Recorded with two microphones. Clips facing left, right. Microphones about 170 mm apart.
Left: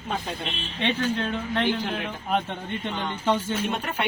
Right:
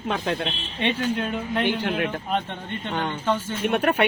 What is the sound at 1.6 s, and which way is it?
Speech, 65° right (ahead or behind).